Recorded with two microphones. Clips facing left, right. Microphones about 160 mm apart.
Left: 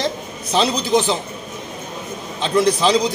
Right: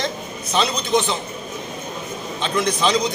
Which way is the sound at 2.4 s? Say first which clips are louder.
Left 5 dB; 30° left (ahead or behind).